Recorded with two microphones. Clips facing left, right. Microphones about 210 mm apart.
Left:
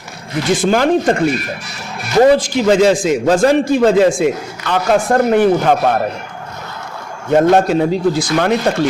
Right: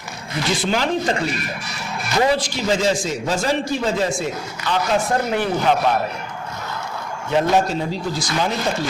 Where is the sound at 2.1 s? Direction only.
50° left (ahead or behind).